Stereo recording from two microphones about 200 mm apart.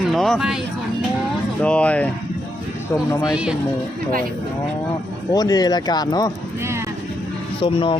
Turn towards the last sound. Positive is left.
turn(degrees=25)  # may be behind; listen again after turning